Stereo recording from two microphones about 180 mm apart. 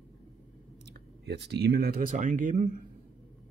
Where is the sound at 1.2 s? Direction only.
65° right (ahead or behind); by 2.8 s 45° right (ahead or behind).